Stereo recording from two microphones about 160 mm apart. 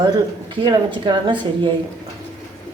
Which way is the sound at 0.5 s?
30° right (ahead or behind).